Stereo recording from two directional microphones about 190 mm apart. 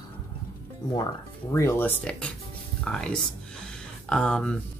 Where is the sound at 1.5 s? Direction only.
10° left (ahead or behind).